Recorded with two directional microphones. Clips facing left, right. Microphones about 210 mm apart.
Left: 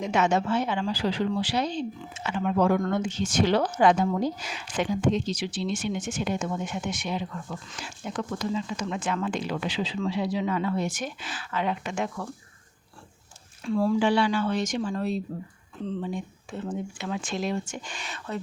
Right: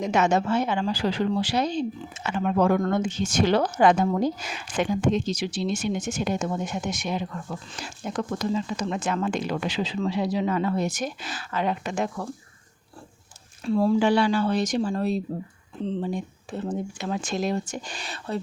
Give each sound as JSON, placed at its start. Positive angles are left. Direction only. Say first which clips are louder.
{"t": 0.0, "sound": "a woman's voice", "louder": "right 2 dB", "side_deg": -40}
{"t": 13.7, "sound": "speech", "louder": "right 3 dB", "side_deg": -35}